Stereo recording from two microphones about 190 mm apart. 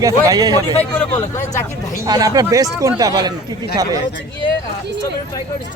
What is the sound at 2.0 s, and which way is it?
Speech, 20° right (ahead or behind).